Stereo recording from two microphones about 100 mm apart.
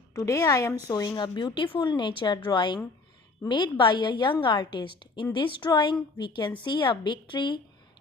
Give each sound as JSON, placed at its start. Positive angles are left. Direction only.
{"t": 0.1, "sound": "a woman's voice", "side_deg": 35}
{"t": 1.2, "sound": "a woman's voice", "side_deg": 45}